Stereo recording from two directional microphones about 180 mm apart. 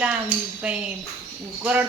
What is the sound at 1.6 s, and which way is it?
Speech, 5° right (ahead or behind).